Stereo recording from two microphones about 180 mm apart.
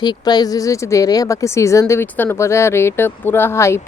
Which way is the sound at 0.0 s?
25° left (ahead or behind).